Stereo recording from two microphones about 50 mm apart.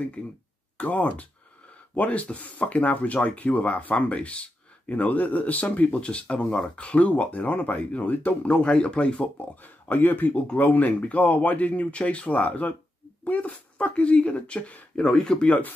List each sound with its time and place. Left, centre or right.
0.2 s speech: left
9.8 s speech: left; by 15.3 s centre
15.4 s speech: left